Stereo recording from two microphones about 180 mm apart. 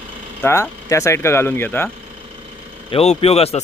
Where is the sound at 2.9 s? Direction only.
35° left (ahead or behind).